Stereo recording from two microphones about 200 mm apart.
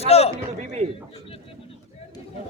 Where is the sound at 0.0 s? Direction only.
30° left (ahead or behind).